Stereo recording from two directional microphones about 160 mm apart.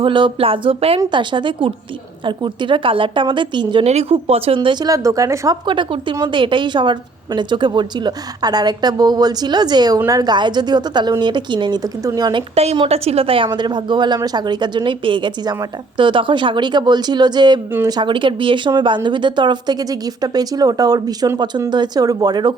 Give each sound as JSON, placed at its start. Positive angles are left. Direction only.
{"t": 0.0, "sound": "a woman's voice", "side_deg": -30}
{"t": 3.8, "sound": "a woman's voice", "side_deg": -40}
{"t": 5.6, "sound": "a woman's voice", "side_deg": -30}